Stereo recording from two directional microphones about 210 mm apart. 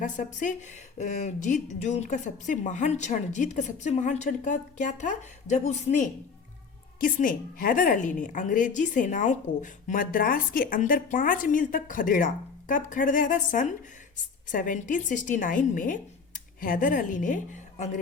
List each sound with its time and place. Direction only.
0.0 s a woman's voice: 35° left (ahead or behind)